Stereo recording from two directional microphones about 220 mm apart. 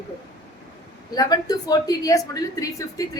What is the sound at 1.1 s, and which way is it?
A woman's voice, 15° left (ahead or behind).